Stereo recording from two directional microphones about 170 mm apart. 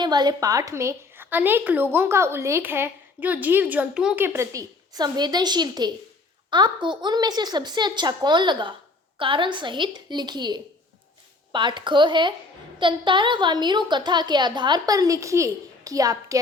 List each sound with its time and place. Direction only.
0.0 s a woman's voice: 25° right (ahead or behind)